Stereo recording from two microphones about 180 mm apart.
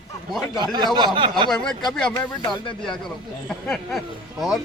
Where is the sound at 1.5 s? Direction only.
Centre (ahead or behind).